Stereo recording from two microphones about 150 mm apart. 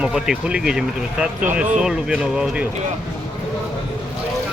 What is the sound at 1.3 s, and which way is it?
Speech, 55° right (ahead or behind).